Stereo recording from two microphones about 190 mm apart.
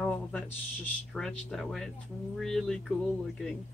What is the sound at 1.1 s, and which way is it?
Speech, 5° left (ahead or behind).